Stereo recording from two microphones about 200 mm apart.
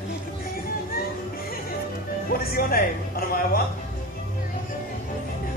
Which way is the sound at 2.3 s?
50° left (ahead or behind).